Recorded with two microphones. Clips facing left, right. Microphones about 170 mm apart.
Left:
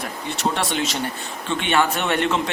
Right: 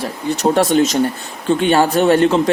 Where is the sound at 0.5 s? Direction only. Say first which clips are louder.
Right 11 dB; 40° right (ahead or behind).